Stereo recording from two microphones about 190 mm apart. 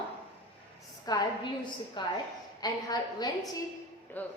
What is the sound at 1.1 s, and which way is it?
A woman's voice, 20° left (ahead or behind).